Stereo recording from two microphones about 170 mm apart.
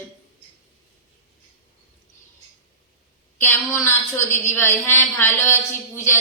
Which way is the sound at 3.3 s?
15° left (ahead or behind).